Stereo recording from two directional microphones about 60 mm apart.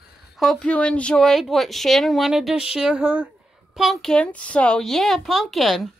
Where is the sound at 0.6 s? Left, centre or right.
Centre.